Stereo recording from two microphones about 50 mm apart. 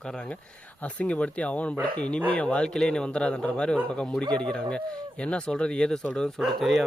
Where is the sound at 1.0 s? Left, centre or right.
Left.